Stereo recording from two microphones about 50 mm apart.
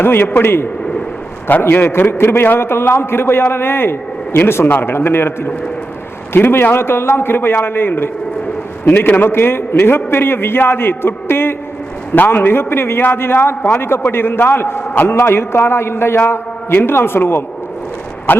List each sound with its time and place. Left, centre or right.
0.0 s a man's voice: left
18.3 s speech: left